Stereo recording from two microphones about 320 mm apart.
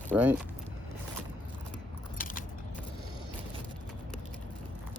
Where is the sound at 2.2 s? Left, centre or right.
Left.